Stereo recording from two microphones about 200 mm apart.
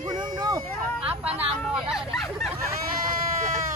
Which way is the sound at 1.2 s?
30° right (ahead or behind).